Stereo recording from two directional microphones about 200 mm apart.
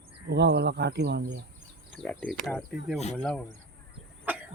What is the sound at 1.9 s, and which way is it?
Speech, 5° left (ahead or behind).